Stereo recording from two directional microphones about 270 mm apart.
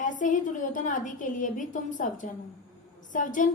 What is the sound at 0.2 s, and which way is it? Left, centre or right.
A woman's voice, left.